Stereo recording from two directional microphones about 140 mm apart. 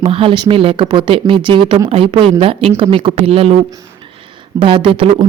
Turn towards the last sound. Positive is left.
turn(degrees=-40)  # may be behind; listen again after turning